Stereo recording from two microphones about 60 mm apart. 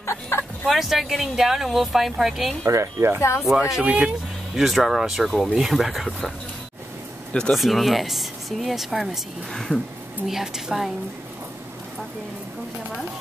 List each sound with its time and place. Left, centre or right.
0.0 s fowl: left
0.7 s speech: centre
2.6 s speech: right
3.4 s speech: centre
3.8 s speech: centre
4.6 s speech: centre
7.5 s speech: centre
9.5 s speech: centre
10.2 s speech: centre